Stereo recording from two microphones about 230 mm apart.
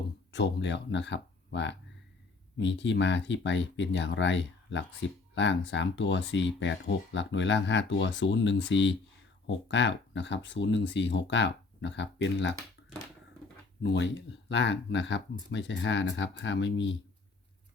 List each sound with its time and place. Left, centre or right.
0.3 s speech: left
13.8 s speech: left